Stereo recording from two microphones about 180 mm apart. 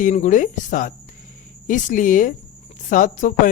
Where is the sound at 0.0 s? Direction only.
45° left (ahead or behind).